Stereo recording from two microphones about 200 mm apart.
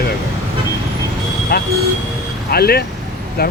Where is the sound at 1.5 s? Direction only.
50° left (ahead or behind).